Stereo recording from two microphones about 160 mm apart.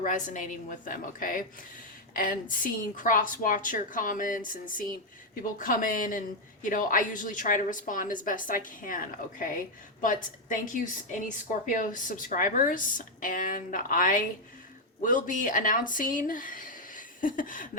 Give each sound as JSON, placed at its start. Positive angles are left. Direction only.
{"t": 0.0, "sound": "a woman's voice", "side_deg": 55}